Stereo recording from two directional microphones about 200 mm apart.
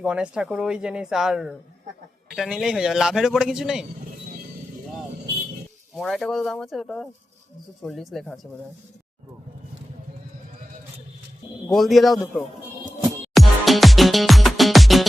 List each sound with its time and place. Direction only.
0.0 s speech: 5° right (ahead or behind)
6.0 s speech: centre (ahead or behind)
11.7 s speech: centre (ahead or behind)
13.1 s music: centre (ahead or behind)